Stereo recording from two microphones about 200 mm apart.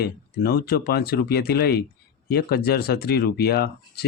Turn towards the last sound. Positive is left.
turn(degrees=50)  # may be behind; listen again after turning